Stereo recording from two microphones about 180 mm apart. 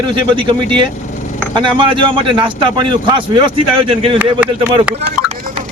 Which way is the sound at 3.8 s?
30° right (ahead or behind).